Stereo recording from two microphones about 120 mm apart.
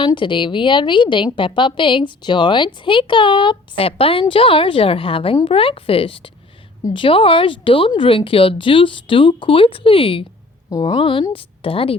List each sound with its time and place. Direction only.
0.0 s a woman's voice: 40° left (ahead or behind)
10.7 s speech: 30° left (ahead or behind)
10.9 s a woman's voice: 45° left (ahead or behind)